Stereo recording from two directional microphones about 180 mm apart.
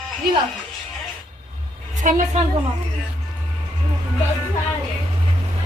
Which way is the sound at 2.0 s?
45° right (ahead or behind).